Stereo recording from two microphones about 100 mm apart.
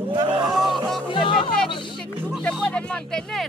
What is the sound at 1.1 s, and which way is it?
Speech, 60° left (ahead or behind).